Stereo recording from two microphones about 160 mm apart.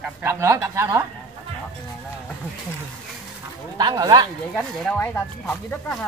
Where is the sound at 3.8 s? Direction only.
25° right (ahead or behind).